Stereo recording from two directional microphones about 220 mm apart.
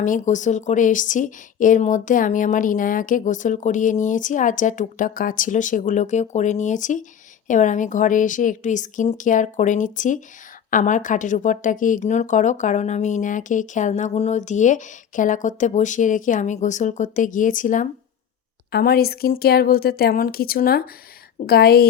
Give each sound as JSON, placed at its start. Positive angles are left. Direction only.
{"t": 0.0, "sound": "a woman's voice", "side_deg": 35}